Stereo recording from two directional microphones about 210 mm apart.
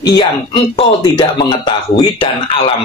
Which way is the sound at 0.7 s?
20° left (ahead or behind).